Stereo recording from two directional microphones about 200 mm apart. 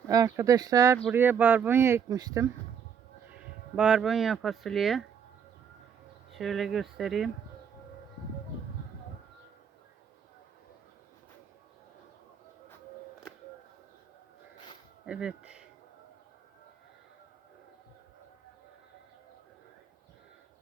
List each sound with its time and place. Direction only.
0.1 s speech: 15° right (ahead or behind)
3.8 s speech: 5° right (ahead or behind)
6.3 s speech: centre (ahead or behind)
15.0 s speech: 5° right (ahead or behind)